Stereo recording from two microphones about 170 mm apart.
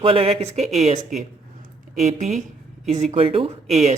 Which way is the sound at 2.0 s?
40° right (ahead or behind).